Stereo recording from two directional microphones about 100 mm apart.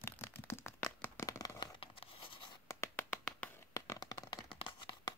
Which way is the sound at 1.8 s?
60° left (ahead or behind).